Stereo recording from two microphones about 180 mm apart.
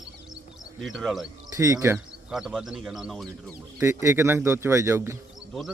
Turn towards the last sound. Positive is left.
turn(degrees=-15)  # may be behind; listen again after turning